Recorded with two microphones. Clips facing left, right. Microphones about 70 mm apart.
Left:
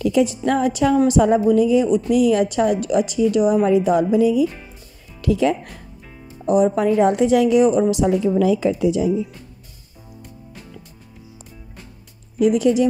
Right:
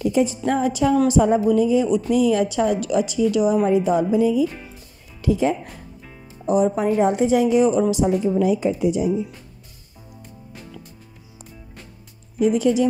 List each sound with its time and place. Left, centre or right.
0.0 s music: left
0.5 s a woman's voice: left
1.5 s a woman's voice: left
3.6 s a woman's voice: left
7.9 s a woman's voice: left
12.4 s a woman's voice: left